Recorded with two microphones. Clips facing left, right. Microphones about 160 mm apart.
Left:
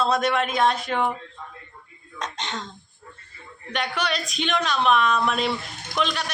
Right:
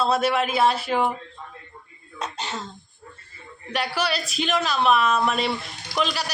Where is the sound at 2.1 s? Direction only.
10° right (ahead or behind).